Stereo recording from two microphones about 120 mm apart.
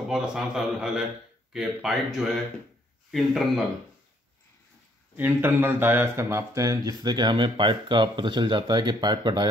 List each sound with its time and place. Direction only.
0.1 s a man's voice: 5° right (ahead or behind)
5.1 s speech: 15° right (ahead or behind); by 9.5 s 35° right (ahead or behind)